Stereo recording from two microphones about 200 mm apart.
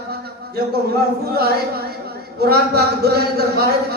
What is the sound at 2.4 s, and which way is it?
A man's voice, 50° right (ahead or behind).